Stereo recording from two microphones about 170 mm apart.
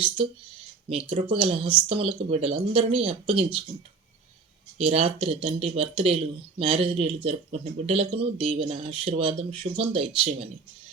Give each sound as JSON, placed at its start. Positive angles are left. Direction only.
{"t": 1.2, "sound": "speech", "side_deg": -30}
{"t": 4.8, "sound": "speech", "side_deg": -35}